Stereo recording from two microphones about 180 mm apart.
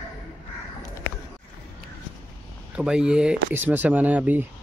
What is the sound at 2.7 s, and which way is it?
Speech, 5° right (ahead or behind).